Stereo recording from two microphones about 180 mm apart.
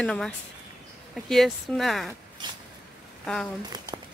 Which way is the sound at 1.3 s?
Centre (ahead or behind).